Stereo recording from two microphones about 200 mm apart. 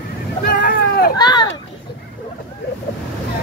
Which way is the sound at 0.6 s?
50° left (ahead or behind).